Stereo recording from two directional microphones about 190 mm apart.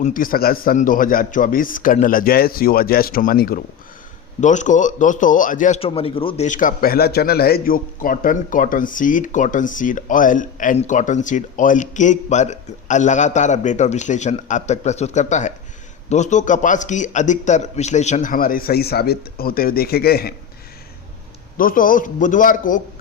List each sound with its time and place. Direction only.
0.0 s a man's voice: 45° left (ahead or behind)
4.4 s speech: 40° left (ahead or behind)
5.8 s a man's voice: 30° left (ahead or behind); by 20.3 s 55° left (ahead or behind)
21.6 s a man's voice: 45° left (ahead or behind)